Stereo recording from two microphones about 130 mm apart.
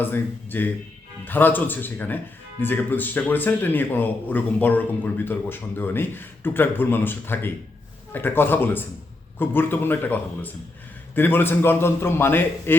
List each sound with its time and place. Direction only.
0.0 s speech: 15° left (ahead or behind)